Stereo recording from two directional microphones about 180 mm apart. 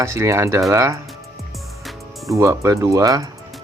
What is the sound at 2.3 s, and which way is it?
Speech, 15° right (ahead or behind).